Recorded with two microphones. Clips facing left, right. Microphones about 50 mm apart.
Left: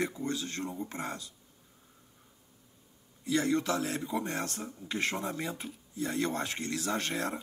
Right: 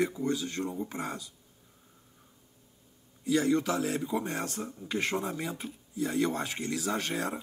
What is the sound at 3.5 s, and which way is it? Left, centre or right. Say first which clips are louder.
Speech: right 2 dB; centre.